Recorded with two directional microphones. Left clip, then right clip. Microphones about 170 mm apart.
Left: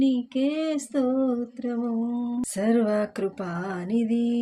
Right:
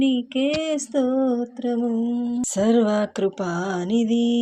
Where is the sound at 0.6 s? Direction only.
20° right (ahead or behind).